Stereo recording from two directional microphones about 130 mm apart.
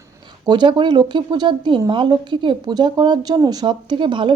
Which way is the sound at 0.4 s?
35° right (ahead or behind).